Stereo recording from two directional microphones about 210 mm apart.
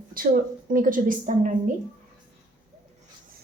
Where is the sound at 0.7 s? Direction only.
40° right (ahead or behind).